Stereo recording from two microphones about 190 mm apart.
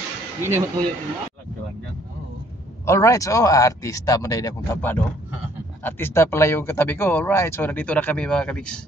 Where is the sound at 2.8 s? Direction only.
15° left (ahead or behind).